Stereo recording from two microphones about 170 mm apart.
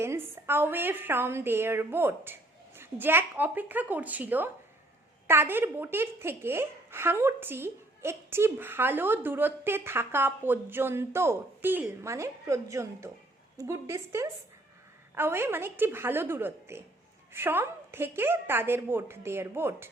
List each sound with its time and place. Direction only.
0.0 s a child's voice: 15° right (ahead or behind)